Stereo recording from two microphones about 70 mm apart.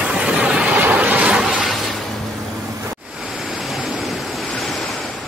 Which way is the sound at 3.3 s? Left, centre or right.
Centre.